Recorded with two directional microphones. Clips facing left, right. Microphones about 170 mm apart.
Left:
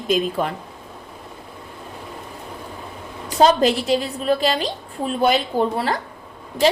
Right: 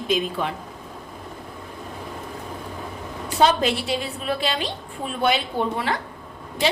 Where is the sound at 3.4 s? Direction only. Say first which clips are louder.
Left 4 dB; 40° left (ahead or behind).